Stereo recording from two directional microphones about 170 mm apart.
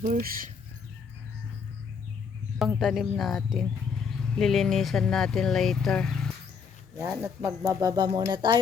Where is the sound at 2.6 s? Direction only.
Centre (ahead or behind).